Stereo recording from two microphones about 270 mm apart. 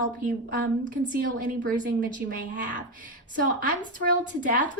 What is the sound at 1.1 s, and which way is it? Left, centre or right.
Speech, right.